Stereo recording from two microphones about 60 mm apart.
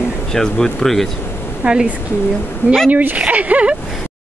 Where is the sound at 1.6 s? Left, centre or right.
Centre.